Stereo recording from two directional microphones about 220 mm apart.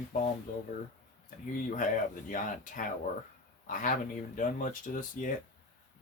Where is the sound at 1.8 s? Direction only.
35° left (ahead or behind).